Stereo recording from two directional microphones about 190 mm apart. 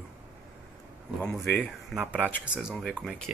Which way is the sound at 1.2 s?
5° left (ahead or behind).